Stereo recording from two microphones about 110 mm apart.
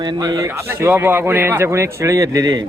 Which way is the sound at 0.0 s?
40° right (ahead or behind).